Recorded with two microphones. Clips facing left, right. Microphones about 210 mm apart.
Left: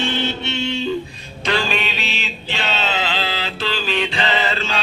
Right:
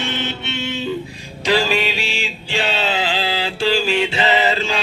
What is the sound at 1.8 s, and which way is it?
Music, 10° right (ahead or behind).